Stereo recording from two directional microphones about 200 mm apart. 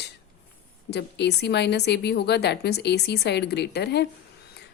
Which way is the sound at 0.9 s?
55° left (ahead or behind).